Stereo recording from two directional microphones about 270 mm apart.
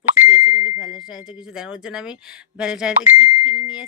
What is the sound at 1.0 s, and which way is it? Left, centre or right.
Speech, centre.